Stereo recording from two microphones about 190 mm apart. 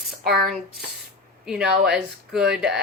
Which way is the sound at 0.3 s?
Centre (ahead or behind).